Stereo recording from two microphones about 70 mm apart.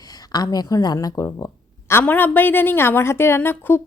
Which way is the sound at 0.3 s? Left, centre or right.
Left.